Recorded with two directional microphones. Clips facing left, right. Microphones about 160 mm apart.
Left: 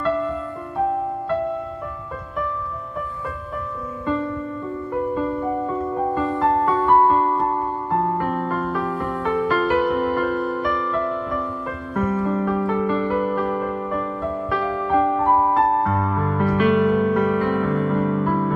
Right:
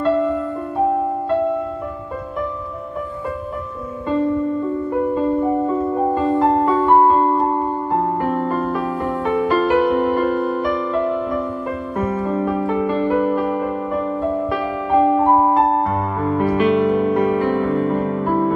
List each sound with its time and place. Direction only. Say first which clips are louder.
5.1 s music: right 5 dB; 20° right (ahead or behind)
9.2 s music: right 3 dB; 20° right (ahead or behind)